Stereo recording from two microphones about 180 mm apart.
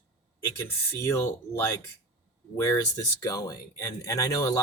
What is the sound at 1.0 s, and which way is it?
Speech, 15° left (ahead or behind).